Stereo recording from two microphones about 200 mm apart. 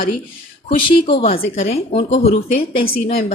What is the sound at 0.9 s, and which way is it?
Speech, 25° left (ahead or behind).